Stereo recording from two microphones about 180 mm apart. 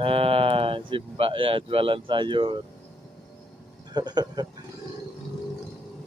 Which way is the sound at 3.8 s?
25° right (ahead or behind).